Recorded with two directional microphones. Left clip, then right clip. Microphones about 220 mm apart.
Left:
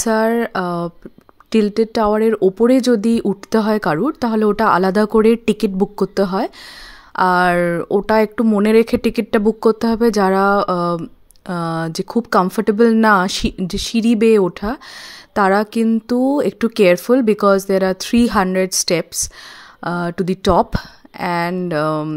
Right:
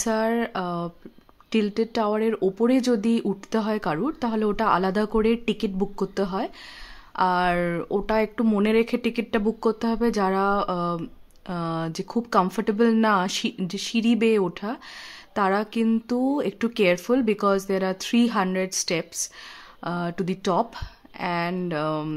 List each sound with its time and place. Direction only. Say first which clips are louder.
0.0 s speech: left 8 dB; 30° left (ahead or behind)